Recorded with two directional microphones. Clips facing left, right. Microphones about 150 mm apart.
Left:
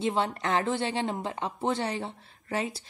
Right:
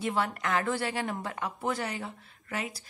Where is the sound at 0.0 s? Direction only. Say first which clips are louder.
Left 2 dB; 25° left (ahead or behind).